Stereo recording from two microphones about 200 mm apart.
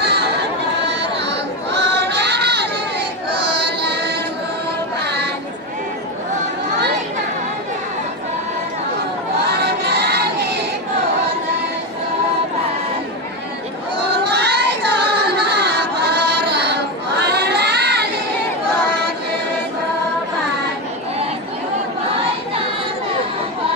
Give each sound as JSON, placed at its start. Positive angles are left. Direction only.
{"t": 0.0, "sound": "chatter", "side_deg": -55}
{"t": 3.3, "sound": "music", "side_deg": -55}
{"t": 5.0, "sound": "a sound", "side_deg": -55}
{"t": 9.5, "sound": "crowd", "side_deg": -55}
{"t": 14.2, "sound": "music", "side_deg": -55}